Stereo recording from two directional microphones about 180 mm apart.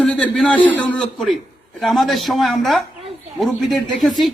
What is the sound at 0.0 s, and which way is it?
A man's voice, 5° left (ahead or behind).